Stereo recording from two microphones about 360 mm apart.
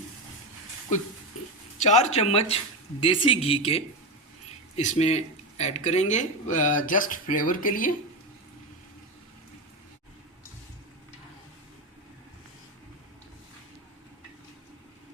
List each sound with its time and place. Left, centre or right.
1.8 s speech: centre